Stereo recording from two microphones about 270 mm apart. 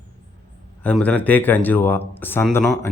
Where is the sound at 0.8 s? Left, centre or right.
Centre.